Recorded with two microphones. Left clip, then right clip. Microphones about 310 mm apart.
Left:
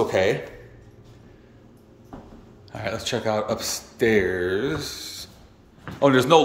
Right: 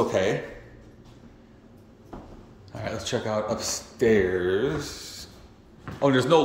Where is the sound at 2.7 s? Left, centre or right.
Centre.